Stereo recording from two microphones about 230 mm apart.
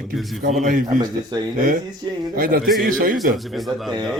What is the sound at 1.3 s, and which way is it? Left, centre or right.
Speech, centre.